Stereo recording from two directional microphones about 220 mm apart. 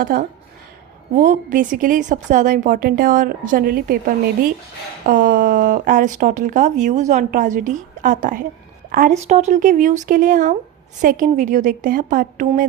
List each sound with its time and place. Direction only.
0.0 s speech: 40° right (ahead or behind)